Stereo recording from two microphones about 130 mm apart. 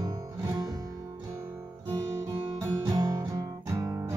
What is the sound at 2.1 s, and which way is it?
Guitar, 20° right (ahead or behind).